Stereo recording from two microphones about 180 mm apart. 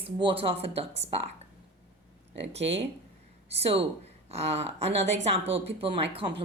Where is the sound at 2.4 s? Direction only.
35° right (ahead or behind).